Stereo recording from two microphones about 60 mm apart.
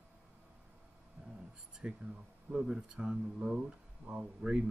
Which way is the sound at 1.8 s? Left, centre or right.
Centre.